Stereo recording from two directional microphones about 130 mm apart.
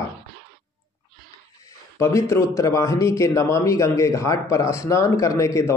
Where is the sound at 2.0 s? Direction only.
20° left (ahead or behind).